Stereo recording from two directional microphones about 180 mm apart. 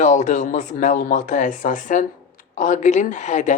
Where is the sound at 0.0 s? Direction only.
45° left (ahead or behind).